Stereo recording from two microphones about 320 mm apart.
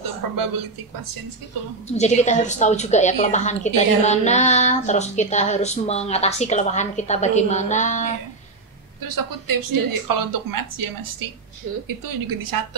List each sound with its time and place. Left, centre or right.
0.2 s a woman's voice: right
1.9 s a woman's voice: left
9.0 s a woman's voice: right
11.6 s a woman's voice: right
12.0 s a woman's voice: right